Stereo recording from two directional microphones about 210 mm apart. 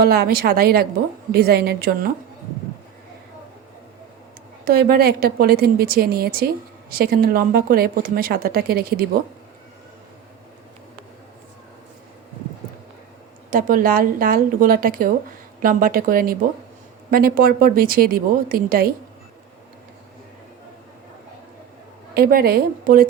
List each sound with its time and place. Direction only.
0.0 s a woman's voice: 45° right (ahead or behind)
4.6 s a woman's voice: 45° right (ahead or behind)
13.5 s a woman's voice: 40° right (ahead or behind)
22.1 s a woman's voice: 45° right (ahead or behind)